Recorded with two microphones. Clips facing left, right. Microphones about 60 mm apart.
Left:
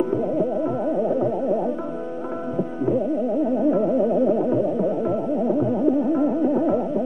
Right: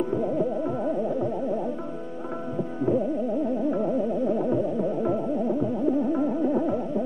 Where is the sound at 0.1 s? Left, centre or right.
Centre.